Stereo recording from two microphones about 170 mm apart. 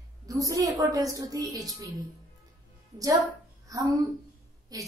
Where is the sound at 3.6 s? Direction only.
20° right (ahead or behind).